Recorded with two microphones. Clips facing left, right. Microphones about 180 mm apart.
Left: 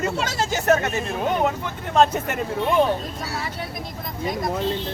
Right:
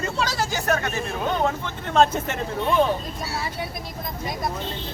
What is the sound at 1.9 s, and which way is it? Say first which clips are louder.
Speech: left 1 dB; 10° left (ahead or behind).